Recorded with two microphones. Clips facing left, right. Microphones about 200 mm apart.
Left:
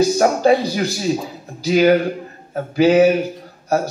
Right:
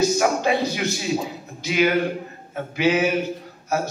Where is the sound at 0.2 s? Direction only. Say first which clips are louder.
Left 6 dB; 40° left (ahead or behind).